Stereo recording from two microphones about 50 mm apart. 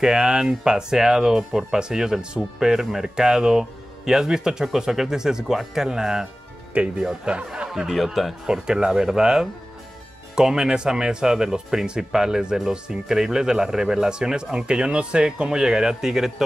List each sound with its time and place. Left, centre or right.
0.0 s speech: centre
6.7 s speech: right
7.9 s speech: centre
8.5 s speech: centre